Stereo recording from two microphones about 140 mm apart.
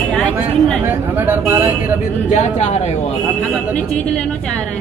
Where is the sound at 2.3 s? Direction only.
55° left (ahead or behind).